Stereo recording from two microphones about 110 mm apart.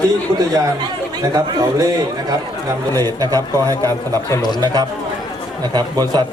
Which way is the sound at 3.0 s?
35° right (ahead or behind).